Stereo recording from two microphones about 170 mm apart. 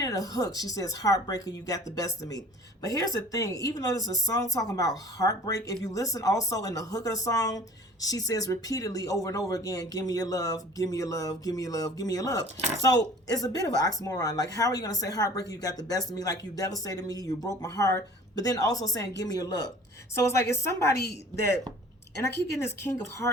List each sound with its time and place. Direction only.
0.0 s speech: 20° left (ahead or behind)
22.2 s speech: 15° left (ahead or behind)